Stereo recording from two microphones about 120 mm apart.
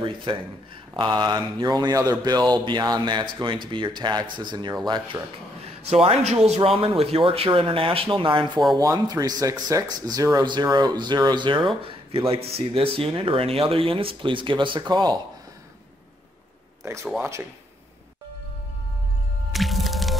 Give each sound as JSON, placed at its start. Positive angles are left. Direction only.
{"t": 0.0, "sound": "speech", "side_deg": -45}
{"t": 0.9, "sound": "mantra", "side_deg": -40}
{"t": 5.9, "sound": "speech", "side_deg": -50}
{"t": 6.2, "sound": "speech", "side_deg": -65}
{"t": 8.7, "sound": "mantra", "side_deg": -35}
{"t": 11.8, "sound": "speech", "side_deg": -50}
{"t": 16.8, "sound": "speech", "side_deg": -25}
{"t": 19.5, "sound": "music", "side_deg": 0}